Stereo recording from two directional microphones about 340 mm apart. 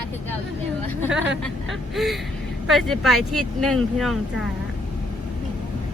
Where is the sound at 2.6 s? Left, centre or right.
Centre.